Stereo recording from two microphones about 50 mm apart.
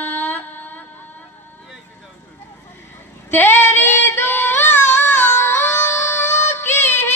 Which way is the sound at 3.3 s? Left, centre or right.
Left.